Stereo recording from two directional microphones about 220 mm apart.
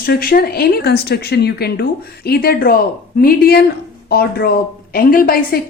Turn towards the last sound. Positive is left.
turn(degrees=40)  # may be behind; listen again after turning